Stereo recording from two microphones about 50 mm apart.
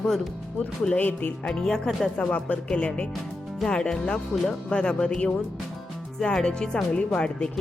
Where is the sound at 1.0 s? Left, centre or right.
Left.